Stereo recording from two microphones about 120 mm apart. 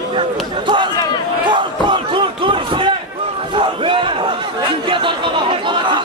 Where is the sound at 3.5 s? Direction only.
45° right (ahead or behind).